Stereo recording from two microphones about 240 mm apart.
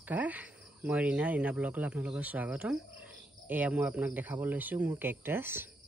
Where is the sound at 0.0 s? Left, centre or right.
Centre.